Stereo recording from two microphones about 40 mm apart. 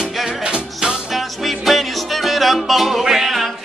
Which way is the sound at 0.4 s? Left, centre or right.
Right.